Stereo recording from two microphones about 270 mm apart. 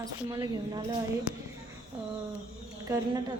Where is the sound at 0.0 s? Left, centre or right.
Centre.